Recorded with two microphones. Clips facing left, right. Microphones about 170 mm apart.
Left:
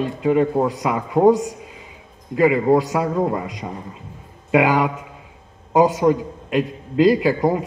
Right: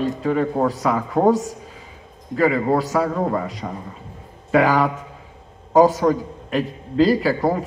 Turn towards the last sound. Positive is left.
turn(degrees=15)  # may be behind; listen again after turning